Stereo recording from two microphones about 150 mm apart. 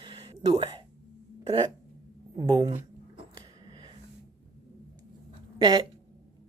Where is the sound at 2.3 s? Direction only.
20° right (ahead or behind).